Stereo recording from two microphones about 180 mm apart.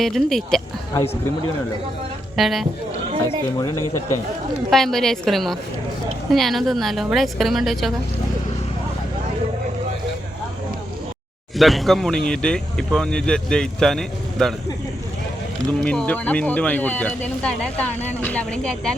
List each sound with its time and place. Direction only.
0.0 s speech: centre (ahead or behind)
2.3 s speech: centre (ahead or behind)
3.2 s speech: 15° left (ahead or behind)
4.7 s speech: centre (ahead or behind)
11.5 s speech: centre (ahead or behind)
15.8 s speech: 5° left (ahead or behind)